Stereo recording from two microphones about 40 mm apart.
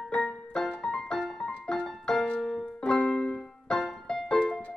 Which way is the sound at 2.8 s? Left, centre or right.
Left.